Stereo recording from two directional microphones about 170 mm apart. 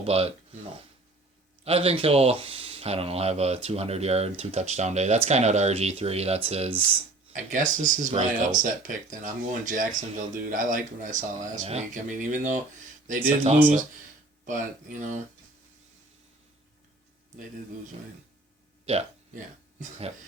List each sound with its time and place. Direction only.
0.0 s speech: 35° right (ahead or behind)
1.6 s speech: 35° right (ahead or behind)
7.3 s speech: 50° right (ahead or behind)
14.4 s speech: 50° right (ahead or behind)
18.9 s speech: 40° right (ahead or behind)